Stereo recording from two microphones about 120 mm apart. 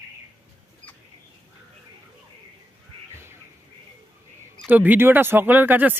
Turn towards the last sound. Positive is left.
turn(degrees=-15)  # may be behind; listen again after turning